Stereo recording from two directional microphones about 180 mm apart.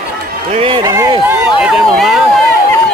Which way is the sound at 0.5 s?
30° right (ahead or behind).